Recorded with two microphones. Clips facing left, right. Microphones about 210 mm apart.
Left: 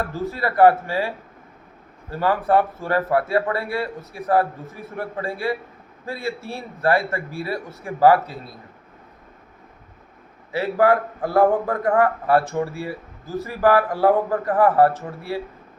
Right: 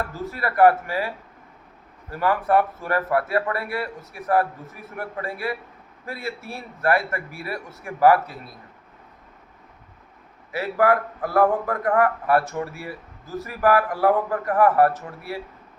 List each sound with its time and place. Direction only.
0.0 s a man's voice: 30° left (ahead or behind)
10.5 s a man's voice: 30° left (ahead or behind)